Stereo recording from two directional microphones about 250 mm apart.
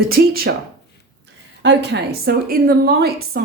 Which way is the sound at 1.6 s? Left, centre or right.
Right.